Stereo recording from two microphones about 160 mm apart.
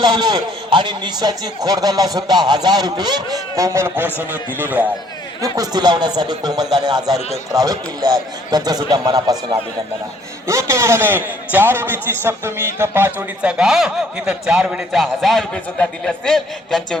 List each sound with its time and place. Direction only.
0.0 s a man's voice: 25° right (ahead or behind); by 4.9 s 10° right (ahead or behind)
5.4 s a man's voice: 25° right (ahead or behind)
10.4 s a man's voice: 20° right (ahead or behind); by 17.0 s 5° left (ahead or behind)